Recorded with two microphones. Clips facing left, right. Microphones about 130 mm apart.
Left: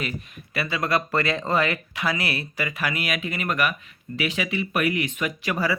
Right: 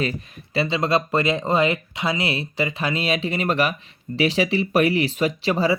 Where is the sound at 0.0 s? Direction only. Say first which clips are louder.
Right 6 dB; 35° right (ahead or behind).